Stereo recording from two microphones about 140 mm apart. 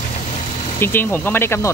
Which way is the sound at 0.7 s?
15° left (ahead or behind).